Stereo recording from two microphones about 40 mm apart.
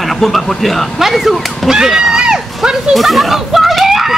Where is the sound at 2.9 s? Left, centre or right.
Centre.